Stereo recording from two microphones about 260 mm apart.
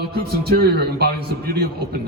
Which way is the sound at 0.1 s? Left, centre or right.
Right.